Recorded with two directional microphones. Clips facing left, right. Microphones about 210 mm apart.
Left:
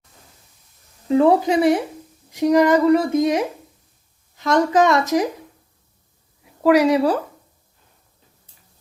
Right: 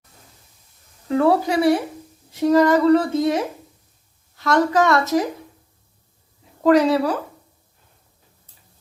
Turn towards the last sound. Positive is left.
turn(degrees=10)  # may be behind; listen again after turning